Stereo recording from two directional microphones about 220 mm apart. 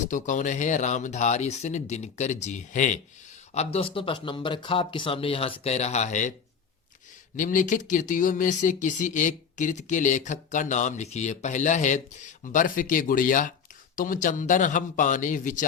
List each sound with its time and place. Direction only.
0.1 s speech: 35° left (ahead or behind)
7.3 s speech: 35° left (ahead or behind)